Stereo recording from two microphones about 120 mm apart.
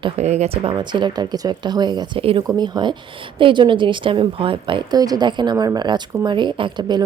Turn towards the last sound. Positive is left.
turn(degrees=-40)  # may be behind; listen again after turning